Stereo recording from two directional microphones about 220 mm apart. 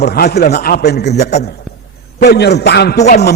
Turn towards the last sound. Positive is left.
turn(degrees=50)  # may be behind; listen again after turning